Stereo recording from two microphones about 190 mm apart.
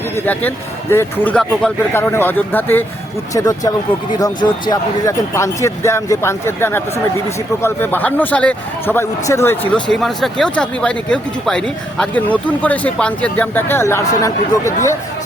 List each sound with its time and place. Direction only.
0.3 s speech: 10° left (ahead or behind)